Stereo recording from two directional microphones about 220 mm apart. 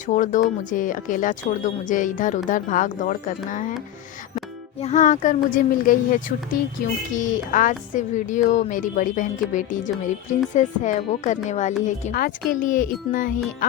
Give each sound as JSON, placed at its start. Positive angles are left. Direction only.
{"t": 0.0, "sound": "speech", "side_deg": 35}
{"t": 4.8, "sound": "speech", "side_deg": 30}